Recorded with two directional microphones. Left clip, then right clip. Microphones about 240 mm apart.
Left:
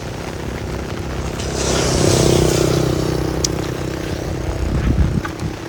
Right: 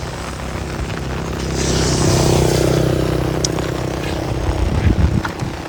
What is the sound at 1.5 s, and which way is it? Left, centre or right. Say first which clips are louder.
Vehicle: left 1 dB; left.